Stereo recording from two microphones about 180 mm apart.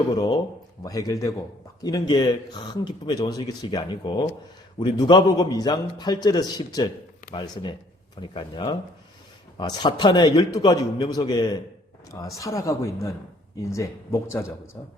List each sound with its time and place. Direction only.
0.1 s speech: 20° left (ahead or behind)